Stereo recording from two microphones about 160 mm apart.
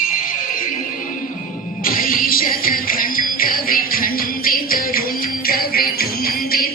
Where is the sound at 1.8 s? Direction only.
65° left (ahead or behind).